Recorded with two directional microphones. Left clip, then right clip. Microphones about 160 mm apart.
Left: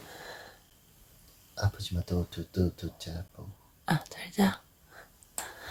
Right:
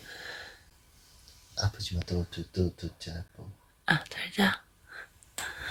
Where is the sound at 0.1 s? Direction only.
20° left (ahead or behind).